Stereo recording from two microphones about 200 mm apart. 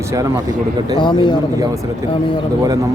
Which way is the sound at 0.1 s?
15° right (ahead or behind).